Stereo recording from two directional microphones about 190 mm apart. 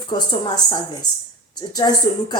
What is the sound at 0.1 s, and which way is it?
Speech, 20° left (ahead or behind).